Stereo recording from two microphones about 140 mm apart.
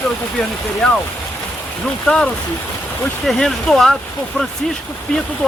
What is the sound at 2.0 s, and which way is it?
Speech, 10° left (ahead or behind).